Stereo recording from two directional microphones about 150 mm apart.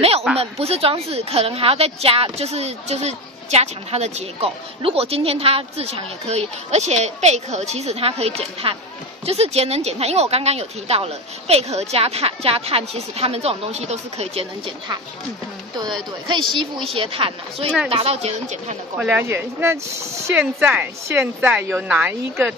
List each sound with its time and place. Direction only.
0.4 s a woman's voice: 40° right (ahead or behind)
15.8 s a woman's voice: 30° right (ahead or behind); by 18.8 s 50° right (ahead or behind)
18.9 s speech: 15° right (ahead or behind)